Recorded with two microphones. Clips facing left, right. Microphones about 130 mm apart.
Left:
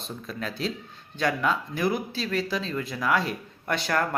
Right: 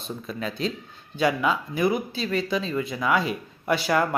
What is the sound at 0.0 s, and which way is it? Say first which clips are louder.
Speech: right 3 dB; centre (ahead or behind).